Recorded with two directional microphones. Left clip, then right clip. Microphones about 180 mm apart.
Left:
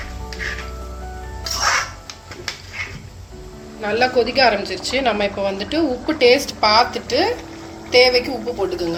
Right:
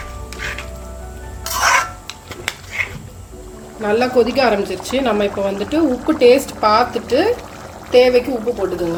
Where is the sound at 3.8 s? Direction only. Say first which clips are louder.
Right 2 dB; 55° right (ahead or behind).